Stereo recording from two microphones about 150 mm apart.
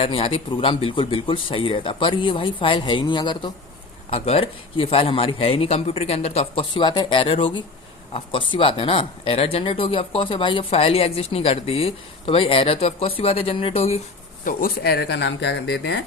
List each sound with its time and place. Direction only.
0.0 s speech: 40° left (ahead or behind)
14.4 s speech: 80° left